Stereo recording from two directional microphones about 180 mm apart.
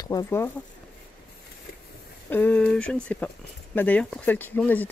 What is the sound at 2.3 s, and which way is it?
Speech, 10° left (ahead or behind).